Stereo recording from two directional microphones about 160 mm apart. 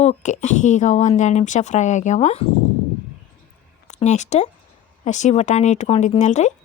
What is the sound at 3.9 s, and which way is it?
A woman's voice, 45° left (ahead or behind).